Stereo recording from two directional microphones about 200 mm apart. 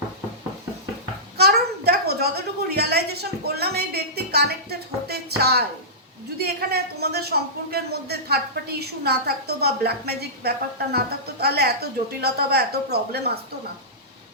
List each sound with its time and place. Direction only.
1.4 s a woman's voice: 50° right (ahead or behind)